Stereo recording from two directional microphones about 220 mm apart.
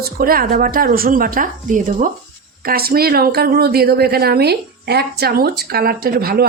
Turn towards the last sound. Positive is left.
turn(degrees=-45)  # may be behind; listen again after turning